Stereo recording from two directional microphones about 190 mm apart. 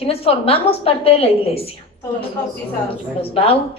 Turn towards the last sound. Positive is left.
turn(degrees=30)  # may be behind; listen again after turning